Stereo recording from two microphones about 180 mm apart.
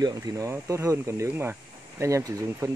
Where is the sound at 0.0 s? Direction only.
20° right (ahead or behind).